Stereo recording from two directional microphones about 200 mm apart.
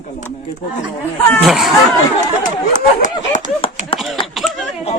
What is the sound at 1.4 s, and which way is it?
Speech, centre (ahead or behind).